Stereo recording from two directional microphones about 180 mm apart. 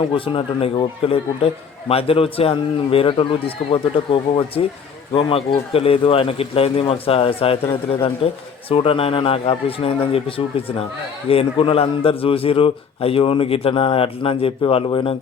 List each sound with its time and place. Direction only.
0.1 s a man's voice: 30° left (ahead or behind)